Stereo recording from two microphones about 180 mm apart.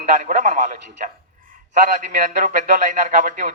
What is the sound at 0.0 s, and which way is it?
A man's voice, 45° right (ahead or behind).